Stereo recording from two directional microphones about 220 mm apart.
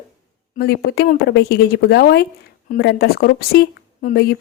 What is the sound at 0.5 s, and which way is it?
A woman's voice, 45° left (ahead or behind).